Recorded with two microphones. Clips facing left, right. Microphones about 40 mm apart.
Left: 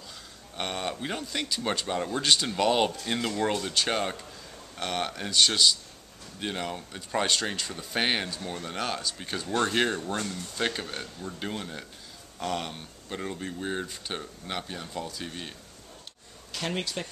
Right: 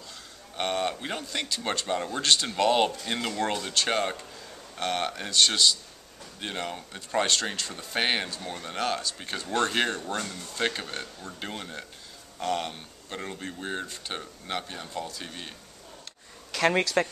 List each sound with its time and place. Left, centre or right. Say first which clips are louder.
0.6 s a man's voice: right 4 dB; centre
16.5 s speech: right 8 dB; right